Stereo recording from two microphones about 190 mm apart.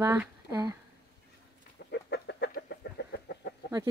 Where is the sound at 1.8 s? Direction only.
65° left (ahead or behind).